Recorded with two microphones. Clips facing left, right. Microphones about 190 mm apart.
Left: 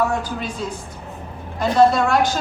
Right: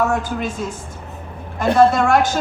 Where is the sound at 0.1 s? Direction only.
50° right (ahead or behind).